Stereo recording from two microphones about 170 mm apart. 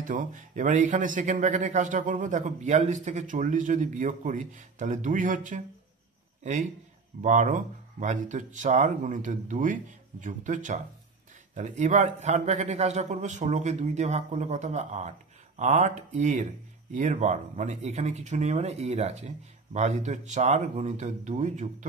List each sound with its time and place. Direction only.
0.0 s speech: 50° right (ahead or behind)